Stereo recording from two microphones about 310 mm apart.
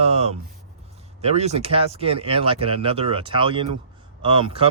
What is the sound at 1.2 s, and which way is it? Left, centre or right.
Speech, centre.